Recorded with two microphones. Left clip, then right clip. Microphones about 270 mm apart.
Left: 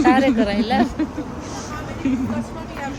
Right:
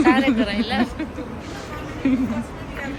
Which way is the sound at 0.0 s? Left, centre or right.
Left.